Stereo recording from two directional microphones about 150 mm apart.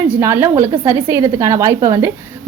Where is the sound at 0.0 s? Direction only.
15° right (ahead or behind).